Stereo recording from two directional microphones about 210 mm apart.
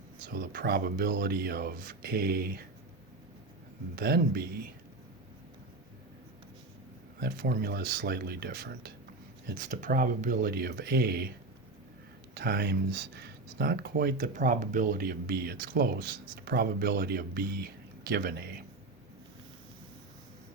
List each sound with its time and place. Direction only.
0.3 s speech: 45° right (ahead or behind)
3.9 s speech: 45° right (ahead or behind)
7.2 s speech: 45° right (ahead or behind)
12.3 s speech: 50° right (ahead or behind)